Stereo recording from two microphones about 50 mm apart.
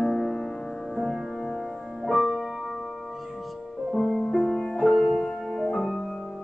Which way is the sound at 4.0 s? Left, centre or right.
Centre.